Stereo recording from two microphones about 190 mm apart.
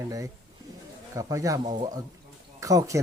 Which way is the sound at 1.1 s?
15° right (ahead or behind).